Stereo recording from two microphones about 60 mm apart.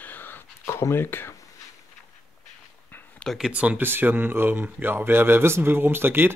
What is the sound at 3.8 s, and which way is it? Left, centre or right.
Speech, right.